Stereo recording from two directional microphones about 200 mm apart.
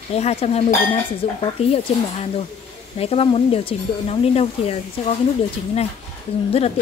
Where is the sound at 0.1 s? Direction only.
30° left (ahead or behind).